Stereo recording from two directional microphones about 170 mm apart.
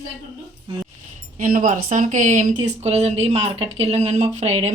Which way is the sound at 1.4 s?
55° right (ahead or behind).